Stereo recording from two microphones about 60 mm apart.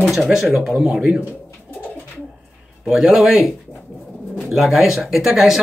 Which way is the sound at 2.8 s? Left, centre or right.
Centre.